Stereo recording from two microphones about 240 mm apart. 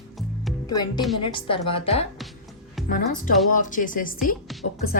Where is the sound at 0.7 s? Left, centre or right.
Centre.